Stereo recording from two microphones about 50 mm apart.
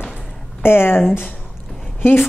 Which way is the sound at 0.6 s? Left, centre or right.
Left.